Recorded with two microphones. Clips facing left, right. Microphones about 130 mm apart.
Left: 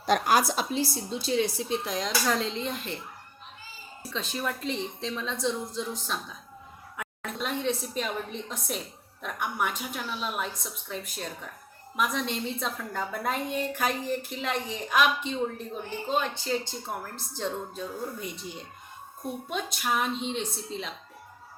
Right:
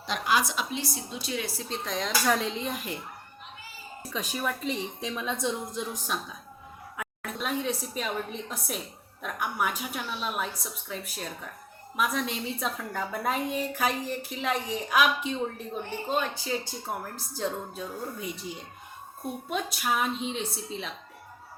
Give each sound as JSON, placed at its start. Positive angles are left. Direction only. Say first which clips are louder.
{"t": 0.0, "sound": "a woman's voice", "louder": "left 4 dB", "side_deg": 45}
{"t": 1.6, "sound": "a woman's voice", "louder": "left 2 dB", "side_deg": 10}
{"t": 4.1, "sound": "a woman's voice", "louder": "even", "side_deg": -10}
{"t": 6.9, "sound": "a woman's voice", "louder": "even", "side_deg": 0}